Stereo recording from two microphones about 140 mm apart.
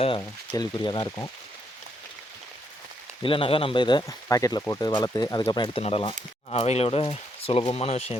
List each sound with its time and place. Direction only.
0.2 s speech: 30° left (ahead or behind)
3.2 s speech: 40° left (ahead or behind)